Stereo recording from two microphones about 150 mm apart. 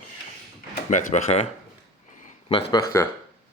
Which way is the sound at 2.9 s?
20° left (ahead or behind).